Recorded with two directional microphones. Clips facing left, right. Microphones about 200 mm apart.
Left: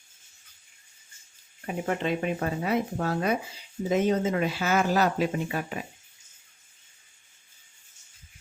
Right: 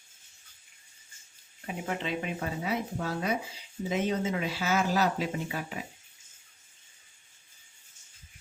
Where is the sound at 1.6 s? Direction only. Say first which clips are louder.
Left 5 dB; 50° left (ahead or behind).